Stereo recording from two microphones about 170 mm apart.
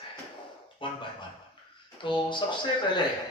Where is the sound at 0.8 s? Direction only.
30° left (ahead or behind).